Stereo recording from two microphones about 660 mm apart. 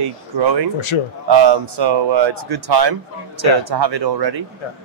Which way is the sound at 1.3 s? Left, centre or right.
Right.